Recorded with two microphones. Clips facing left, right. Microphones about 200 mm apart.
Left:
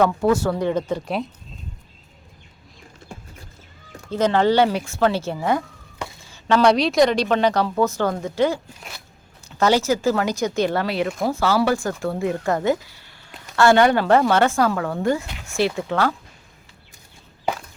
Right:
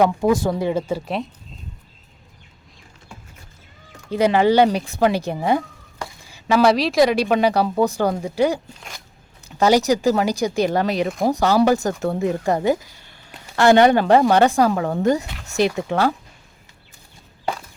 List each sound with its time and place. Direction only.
0.0 s speech: 15° right (ahead or behind)
4.1 s speech: 10° right (ahead or behind)
6.3 s speech: 5° right (ahead or behind); by 12.5 s 20° right (ahead or behind)
13.6 s speech: 20° right (ahead or behind)